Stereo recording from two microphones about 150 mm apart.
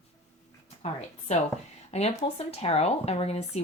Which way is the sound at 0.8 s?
45° left (ahead or behind).